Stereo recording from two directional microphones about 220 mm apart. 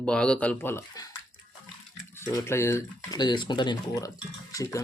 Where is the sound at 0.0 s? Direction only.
5° left (ahead or behind).